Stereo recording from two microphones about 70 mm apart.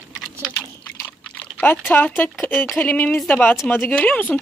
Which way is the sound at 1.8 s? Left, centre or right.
Left.